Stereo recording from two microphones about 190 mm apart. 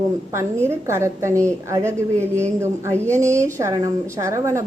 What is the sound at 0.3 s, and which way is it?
Speech, 15° right (ahead or behind).